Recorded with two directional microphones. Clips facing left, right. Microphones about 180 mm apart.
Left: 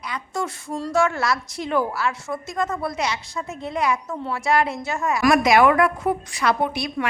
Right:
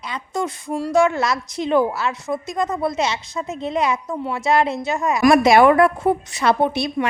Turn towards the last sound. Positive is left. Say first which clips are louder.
# right 4 dB
turn(degrees=-25)  # may be behind; listen again after turning